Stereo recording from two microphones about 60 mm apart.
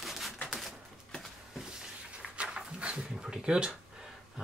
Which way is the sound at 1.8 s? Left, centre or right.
Centre.